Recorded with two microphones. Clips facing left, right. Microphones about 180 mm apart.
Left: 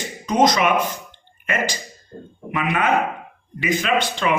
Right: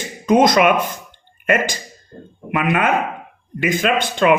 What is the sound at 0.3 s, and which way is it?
Speech, 55° right (ahead or behind).